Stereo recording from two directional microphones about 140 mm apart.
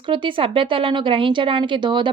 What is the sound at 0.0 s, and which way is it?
A woman's voice, 35° right (ahead or behind).